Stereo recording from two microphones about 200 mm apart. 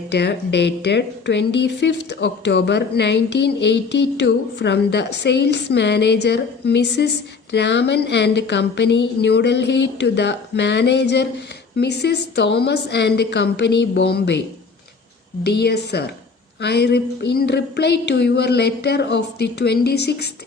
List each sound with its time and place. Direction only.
0.1 s a woman's voice: 60° left (ahead or behind)
15.4 s a woman's voice: 55° left (ahead or behind)